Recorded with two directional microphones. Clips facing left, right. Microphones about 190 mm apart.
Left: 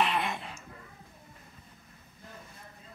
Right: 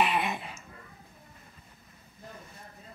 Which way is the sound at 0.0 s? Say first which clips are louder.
Right 2 dB; 10° right (ahead or behind).